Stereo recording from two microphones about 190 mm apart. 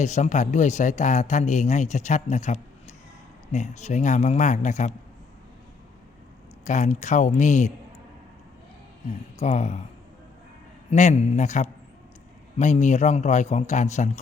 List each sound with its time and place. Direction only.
0.0 s speech: 40° left (ahead or behind)
6.7 s speech: 40° left (ahead or behind)
9.4 s speech: 35° left (ahead or behind)
10.9 s speech: 40° left (ahead or behind)